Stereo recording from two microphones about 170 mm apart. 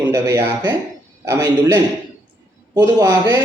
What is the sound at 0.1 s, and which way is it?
A man's voice, 20° right (ahead or behind).